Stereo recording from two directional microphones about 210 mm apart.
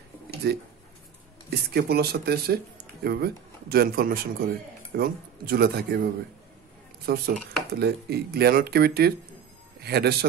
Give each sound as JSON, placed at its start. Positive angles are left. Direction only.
{"t": 1.5, "sound": "speech", "side_deg": -50}
{"t": 7.1, "sound": "a man's voice", "side_deg": -50}